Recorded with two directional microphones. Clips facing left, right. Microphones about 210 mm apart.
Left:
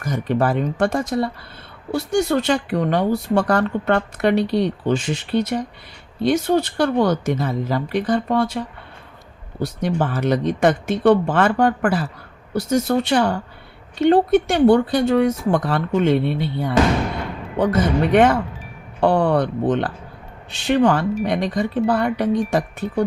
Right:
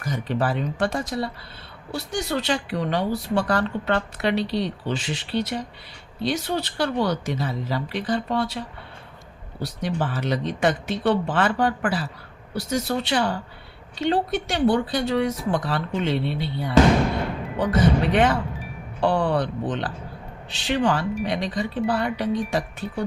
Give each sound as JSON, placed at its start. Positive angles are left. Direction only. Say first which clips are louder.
{"t": 0.0, "sound": "speech", "louder": "left 5 dB", "side_deg": 50}
{"t": 18.1, "sound": "speech", "louder": "left 5 dB", "side_deg": 50}